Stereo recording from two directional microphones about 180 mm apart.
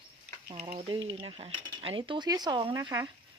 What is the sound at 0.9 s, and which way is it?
Speech, 25° right (ahead or behind).